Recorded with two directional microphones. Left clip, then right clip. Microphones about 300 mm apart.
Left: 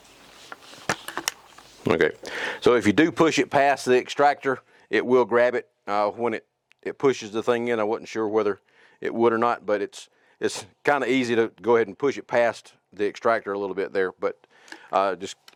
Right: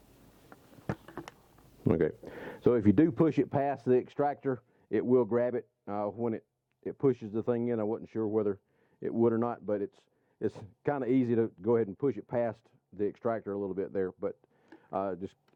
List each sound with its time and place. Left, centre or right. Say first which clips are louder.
0.5 s speech: left 13 dB; centre